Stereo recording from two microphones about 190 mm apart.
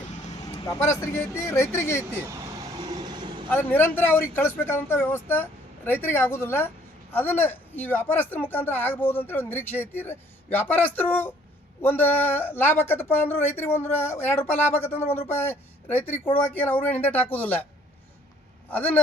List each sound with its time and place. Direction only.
0.6 s speech: 15° left (ahead or behind)
2.1 s vehicle: 20° right (ahead or behind)
3.5 s speech: 10° left (ahead or behind)
18.7 s speech: 10° left (ahead or behind)